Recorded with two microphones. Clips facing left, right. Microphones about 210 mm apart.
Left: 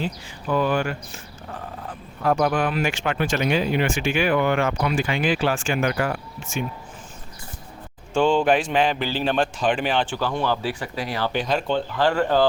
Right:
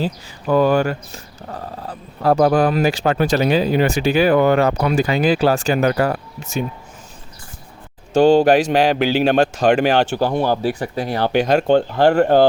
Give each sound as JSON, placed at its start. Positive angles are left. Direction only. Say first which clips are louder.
{"t": 0.0, "sound": "speech", "louder": "right 5 dB", "side_deg": -40}
{"t": 8.1, "sound": "speech", "louder": "right 7 dB", "side_deg": -40}
{"t": 8.9, "sound": "a man's voice", "louder": "right 8 dB", "side_deg": -75}
{"t": 9.4, "sound": "speech", "louder": "right 7 dB", "side_deg": -40}